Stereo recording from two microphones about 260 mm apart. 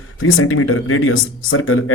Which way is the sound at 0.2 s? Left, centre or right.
Left.